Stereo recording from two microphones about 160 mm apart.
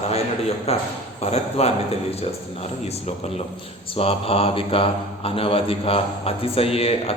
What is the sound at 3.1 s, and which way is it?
Speech, 40° left (ahead or behind).